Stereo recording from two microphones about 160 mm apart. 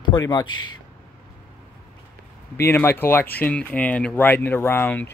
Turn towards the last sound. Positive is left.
turn(degrees=15)  # may be behind; listen again after turning